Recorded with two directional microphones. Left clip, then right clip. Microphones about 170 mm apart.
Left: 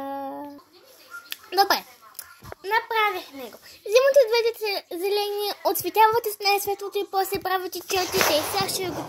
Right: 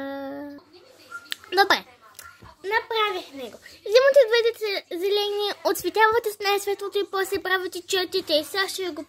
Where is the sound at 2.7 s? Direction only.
10° right (ahead or behind).